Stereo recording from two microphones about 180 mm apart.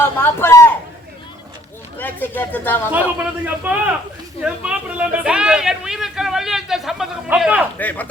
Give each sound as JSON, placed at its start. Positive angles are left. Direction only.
{"t": 0.0, "sound": "speech", "side_deg": 15}
{"t": 2.0, "sound": "speech", "side_deg": 10}
{"t": 2.9, "sound": "a man's voice", "side_deg": -10}
{"t": 7.8, "sound": "speech", "side_deg": 10}